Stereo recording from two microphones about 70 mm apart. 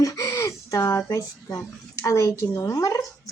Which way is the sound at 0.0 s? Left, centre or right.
Left.